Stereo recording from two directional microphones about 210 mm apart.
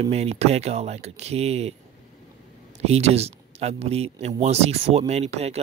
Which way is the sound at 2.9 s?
30° right (ahead or behind).